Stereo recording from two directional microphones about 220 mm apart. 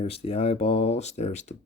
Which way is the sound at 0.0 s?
25° left (ahead or behind).